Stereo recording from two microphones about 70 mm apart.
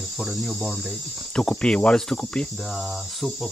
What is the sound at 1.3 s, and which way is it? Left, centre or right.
Speech, centre.